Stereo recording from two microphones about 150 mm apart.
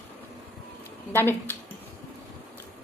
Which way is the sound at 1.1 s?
15° left (ahead or behind).